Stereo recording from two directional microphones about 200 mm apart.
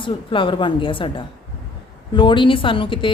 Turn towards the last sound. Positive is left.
turn(degrees=25)  # may be behind; listen again after turning